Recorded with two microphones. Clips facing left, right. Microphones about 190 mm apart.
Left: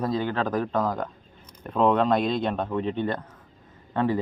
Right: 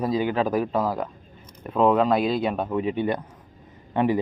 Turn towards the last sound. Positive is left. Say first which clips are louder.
# right 3 dB
turn(degrees=-15)  # may be behind; listen again after turning